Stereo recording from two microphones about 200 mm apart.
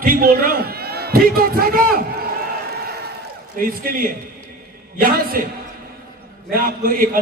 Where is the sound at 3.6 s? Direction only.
45° right (ahead or behind).